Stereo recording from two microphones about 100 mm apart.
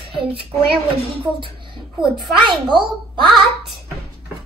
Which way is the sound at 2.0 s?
50° right (ahead or behind).